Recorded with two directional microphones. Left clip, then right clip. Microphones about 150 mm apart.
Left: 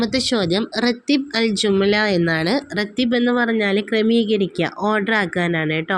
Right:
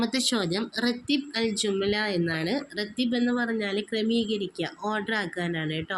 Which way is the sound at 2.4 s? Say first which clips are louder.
Left 9 dB; 65° left (ahead or behind).